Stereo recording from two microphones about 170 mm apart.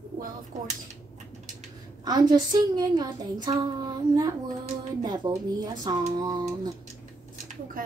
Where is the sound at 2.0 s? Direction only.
25° right (ahead or behind).